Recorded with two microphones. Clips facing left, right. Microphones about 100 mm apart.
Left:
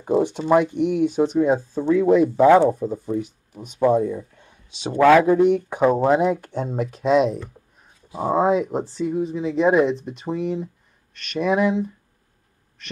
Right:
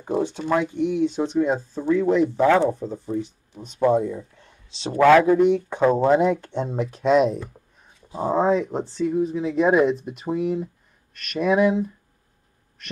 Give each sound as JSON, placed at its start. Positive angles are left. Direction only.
{"t": 0.0, "sound": "speech", "side_deg": 15}
{"t": 8.1, "sound": "speech", "side_deg": 15}